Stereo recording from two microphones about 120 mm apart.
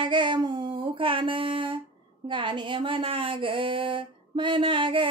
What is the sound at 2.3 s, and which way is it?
Speech, 40° right (ahead or behind).